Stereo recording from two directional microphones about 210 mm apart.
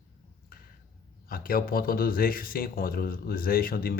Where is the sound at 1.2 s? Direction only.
45° left (ahead or behind).